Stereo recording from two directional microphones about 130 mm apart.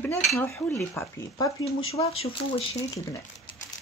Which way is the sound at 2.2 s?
45° left (ahead or behind).